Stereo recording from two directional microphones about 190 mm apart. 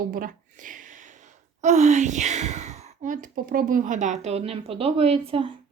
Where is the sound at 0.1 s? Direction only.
45° right (ahead or behind).